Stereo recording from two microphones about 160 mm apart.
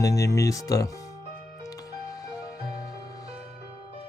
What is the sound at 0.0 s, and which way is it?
Speech, 20° left (ahead or behind).